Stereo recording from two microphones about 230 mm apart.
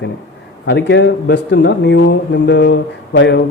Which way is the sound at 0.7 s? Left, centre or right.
Left.